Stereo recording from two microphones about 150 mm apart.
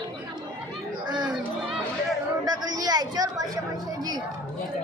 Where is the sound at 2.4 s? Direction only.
25° right (ahead or behind).